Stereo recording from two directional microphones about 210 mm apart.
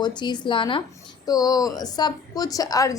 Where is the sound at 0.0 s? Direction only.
20° left (ahead or behind).